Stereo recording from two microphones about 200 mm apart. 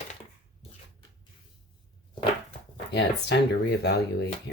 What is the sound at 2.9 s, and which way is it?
Speech, 55° left (ahead or behind).